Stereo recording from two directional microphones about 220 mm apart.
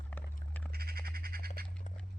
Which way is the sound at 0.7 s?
45° right (ahead or behind).